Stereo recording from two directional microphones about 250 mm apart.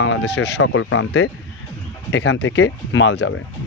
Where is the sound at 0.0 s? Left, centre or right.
Left.